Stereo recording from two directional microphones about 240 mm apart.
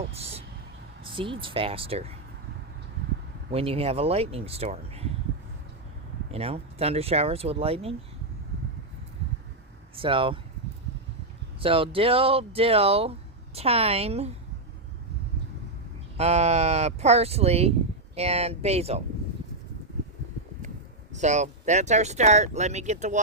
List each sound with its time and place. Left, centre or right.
0.1 s speech: right
3.5 s speech: right
6.3 s speech: right
9.9 s speech: right
11.6 s speech: right
16.1 s speech: right
21.1 s speech: right